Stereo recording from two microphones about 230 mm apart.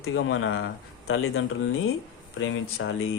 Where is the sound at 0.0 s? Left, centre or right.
Left.